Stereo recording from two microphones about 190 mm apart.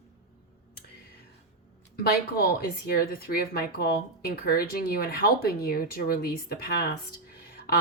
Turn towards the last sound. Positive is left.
turn(degrees=55)  # may be behind; listen again after turning